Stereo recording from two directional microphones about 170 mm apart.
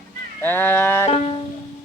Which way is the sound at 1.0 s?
40° left (ahead or behind).